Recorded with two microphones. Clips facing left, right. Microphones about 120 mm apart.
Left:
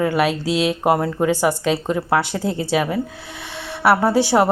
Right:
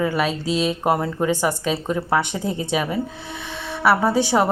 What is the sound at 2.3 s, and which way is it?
Speech, 80° left.